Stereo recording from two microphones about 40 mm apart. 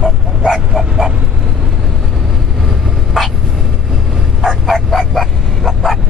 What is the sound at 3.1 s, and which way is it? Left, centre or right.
Vehicle, centre.